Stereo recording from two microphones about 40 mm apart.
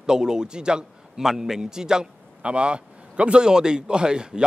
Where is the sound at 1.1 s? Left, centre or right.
Centre.